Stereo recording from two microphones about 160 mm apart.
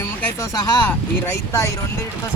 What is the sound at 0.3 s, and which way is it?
Speech, 20° left (ahead or behind).